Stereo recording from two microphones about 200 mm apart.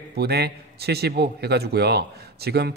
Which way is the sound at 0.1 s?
55° right (ahead or behind).